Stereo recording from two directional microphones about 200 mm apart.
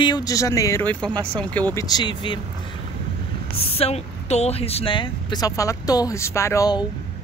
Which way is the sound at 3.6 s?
30° left (ahead or behind).